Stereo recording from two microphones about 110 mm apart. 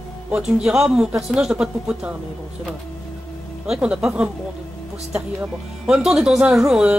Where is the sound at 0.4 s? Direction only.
5° right (ahead or behind).